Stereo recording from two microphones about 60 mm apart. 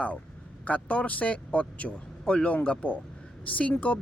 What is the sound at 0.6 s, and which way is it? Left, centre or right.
A man's voice, left.